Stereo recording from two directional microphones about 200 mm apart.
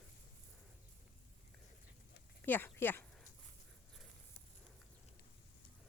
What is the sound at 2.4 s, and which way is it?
Speech, 10° left (ahead or behind).